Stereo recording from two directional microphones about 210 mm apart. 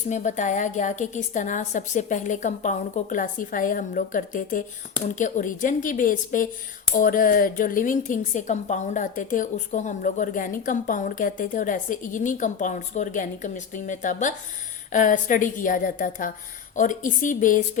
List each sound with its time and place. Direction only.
0.1 s a woman's voice: 35° left (ahead or behind)